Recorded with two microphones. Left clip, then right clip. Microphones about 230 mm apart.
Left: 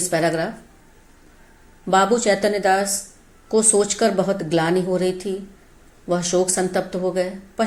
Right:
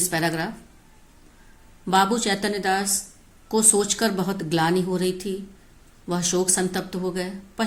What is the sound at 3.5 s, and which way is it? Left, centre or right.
Speech, right.